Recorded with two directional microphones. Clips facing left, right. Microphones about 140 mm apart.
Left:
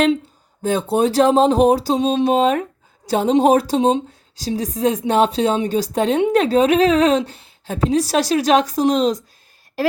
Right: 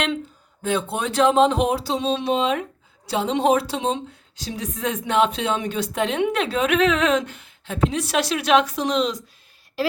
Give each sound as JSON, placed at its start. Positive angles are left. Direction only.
{"t": 0.6, "sound": "a woman's voice", "side_deg": 40}